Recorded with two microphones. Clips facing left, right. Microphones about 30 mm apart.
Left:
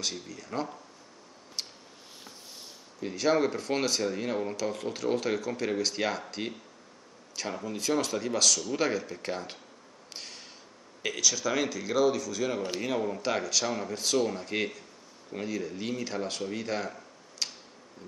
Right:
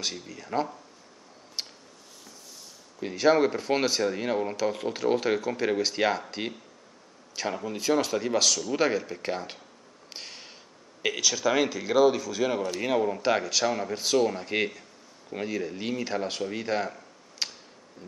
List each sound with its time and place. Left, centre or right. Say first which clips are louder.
0.0 s speech: right 1 dB; centre
1.6 s a sound: right 2 dB; centre
3.0 s speech: right 4 dB; centre
7.3 s speech: right 3 dB; centre
10.1 s a sound: right 2 dB; centre
11.0 s a man's voice: right 2 dB; centre